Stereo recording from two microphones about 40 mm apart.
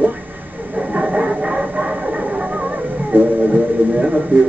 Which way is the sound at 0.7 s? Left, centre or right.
Right.